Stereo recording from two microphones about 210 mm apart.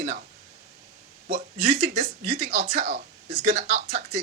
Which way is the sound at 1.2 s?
35° right (ahead or behind).